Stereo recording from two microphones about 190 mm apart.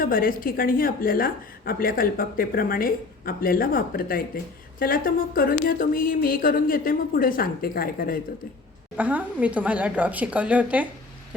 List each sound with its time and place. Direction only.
0.0 s a woman's voice: 50° left (ahead or behind)
9.0 s a woman's voice: 10° right (ahead or behind)